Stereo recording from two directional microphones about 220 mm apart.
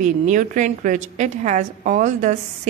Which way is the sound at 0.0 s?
35° right (ahead or behind).